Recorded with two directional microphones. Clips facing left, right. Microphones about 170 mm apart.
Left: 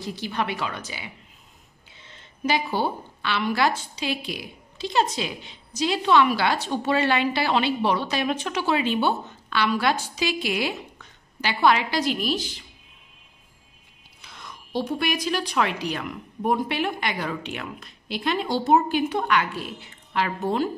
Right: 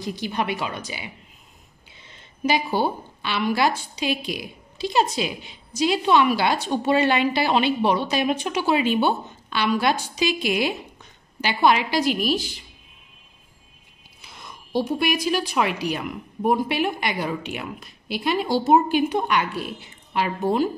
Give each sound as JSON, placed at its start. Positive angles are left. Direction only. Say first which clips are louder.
{"t": 0.0, "sound": "speech", "louder": "right 2 dB", "side_deg": -15}
{"t": 14.2, "sound": "speech", "louder": "even", "side_deg": -10}